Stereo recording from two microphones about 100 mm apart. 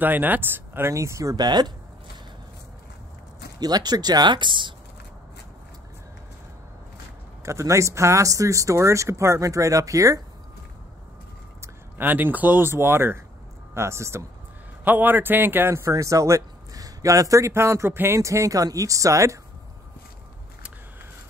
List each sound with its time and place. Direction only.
0.0 s speech: 20° right (ahead or behind)
1.3 s speech: 45° right (ahead or behind)
3.5 s speech: 45° right (ahead or behind)
7.4 s a man's voice: 30° right (ahead or behind)
11.6 s a man's voice: 20° right (ahead or behind)